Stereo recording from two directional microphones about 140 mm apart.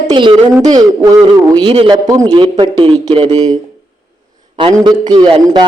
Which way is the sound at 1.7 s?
40° right (ahead or behind).